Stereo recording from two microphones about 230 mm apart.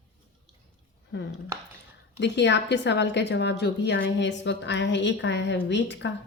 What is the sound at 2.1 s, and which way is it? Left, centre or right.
Speech, left.